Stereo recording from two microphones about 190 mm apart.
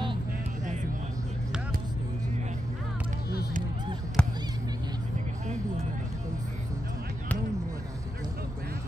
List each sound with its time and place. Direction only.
4.2 s basketball bounce: 5° left (ahead or behind)